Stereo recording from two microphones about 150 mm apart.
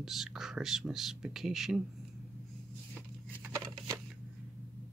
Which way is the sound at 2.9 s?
10° right (ahead or behind).